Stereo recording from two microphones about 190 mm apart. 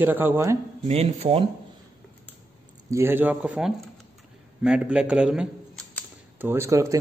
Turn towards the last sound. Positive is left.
turn(degrees=-15)  # may be behind; listen again after turning